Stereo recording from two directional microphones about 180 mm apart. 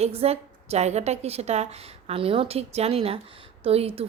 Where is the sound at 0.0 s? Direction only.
35° right (ahead or behind).